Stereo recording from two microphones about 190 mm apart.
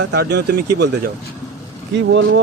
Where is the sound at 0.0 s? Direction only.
60° right (ahead or behind).